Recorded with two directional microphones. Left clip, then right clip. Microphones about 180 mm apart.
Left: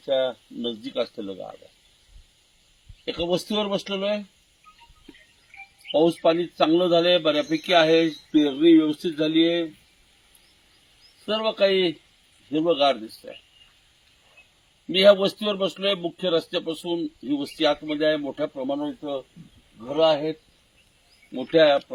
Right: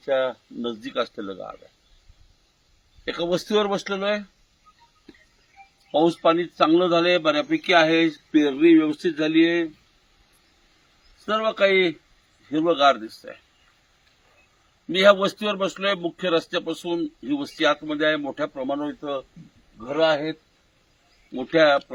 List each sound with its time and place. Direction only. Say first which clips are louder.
0.0 s speech: right 1 dB; 5° right (ahead or behind)
3.1 s speech: right 2 dB; centre (ahead or behind)
5.9 s a man's voice: right 1 dB; 20° left (ahead or behind); by 9.5 s 35° left (ahead or behind)
11.3 s speech: right 1 dB; 15° left (ahead or behind)
14.9 s speech: even; centre (ahead or behind)
21.3 s a man's voice: even; 25° left (ahead or behind)